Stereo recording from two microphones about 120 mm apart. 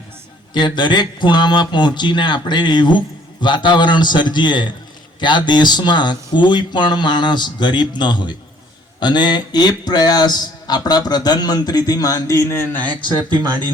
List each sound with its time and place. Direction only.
0.5 s speech: 40° left (ahead or behind); by 13.0 s 15° left (ahead or behind)